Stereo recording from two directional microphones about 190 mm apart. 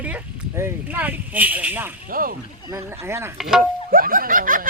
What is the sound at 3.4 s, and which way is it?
Speech, centre (ahead or behind).